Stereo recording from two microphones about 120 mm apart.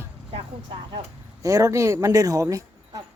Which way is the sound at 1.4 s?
30° right (ahead or behind).